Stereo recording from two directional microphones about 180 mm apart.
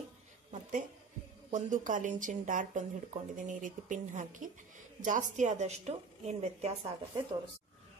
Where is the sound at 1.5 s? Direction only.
45° right (ahead or behind).